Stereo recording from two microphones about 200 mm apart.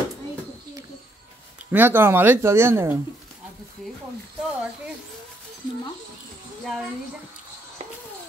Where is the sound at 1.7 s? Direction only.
10° right (ahead or behind).